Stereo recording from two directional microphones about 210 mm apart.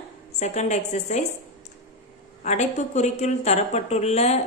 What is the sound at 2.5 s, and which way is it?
Speech, 35° left (ahead or behind).